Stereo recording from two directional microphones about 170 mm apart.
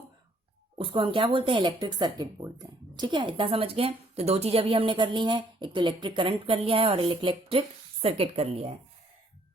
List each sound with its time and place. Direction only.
0.8 s a woman's voice: 30° right (ahead or behind)